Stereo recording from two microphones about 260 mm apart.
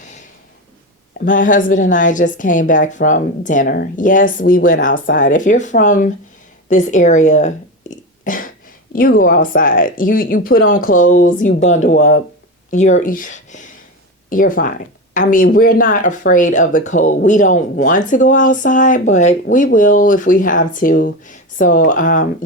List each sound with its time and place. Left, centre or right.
1.2 s speech: left